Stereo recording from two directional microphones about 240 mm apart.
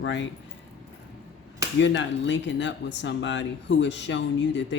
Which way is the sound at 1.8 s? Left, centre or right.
Left.